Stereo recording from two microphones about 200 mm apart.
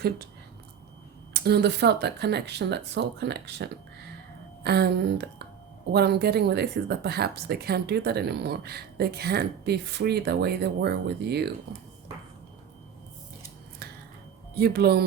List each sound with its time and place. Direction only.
1.3 s speech: 55° right (ahead or behind)
14.5 s speech: 55° right (ahead or behind)